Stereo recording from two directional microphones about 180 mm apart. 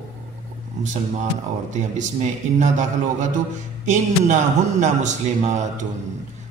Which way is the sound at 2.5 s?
40° right (ahead or behind).